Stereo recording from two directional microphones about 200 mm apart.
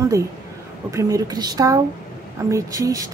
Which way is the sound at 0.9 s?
15° right (ahead or behind).